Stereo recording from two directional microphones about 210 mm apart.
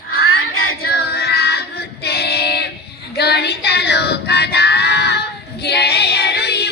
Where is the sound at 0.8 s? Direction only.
50° left (ahead or behind).